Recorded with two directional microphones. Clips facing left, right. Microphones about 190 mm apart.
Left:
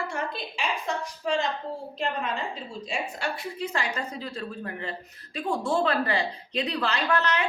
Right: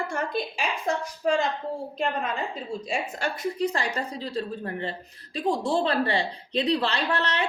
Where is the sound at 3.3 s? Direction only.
40° right (ahead or behind).